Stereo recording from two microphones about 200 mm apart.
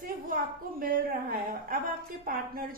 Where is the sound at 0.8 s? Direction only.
45° right (ahead or behind).